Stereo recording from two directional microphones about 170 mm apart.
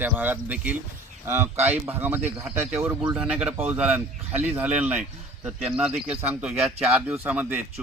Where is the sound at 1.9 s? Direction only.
10° right (ahead or behind).